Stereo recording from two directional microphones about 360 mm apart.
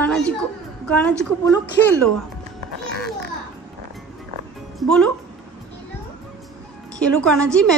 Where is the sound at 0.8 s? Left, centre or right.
Centre.